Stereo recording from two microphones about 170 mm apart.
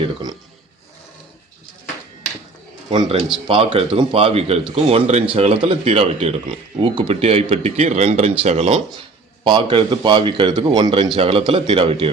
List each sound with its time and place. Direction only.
0.0 s a man's voice: 25° right (ahead or behind)
2.9 s speech: 30° right (ahead or behind)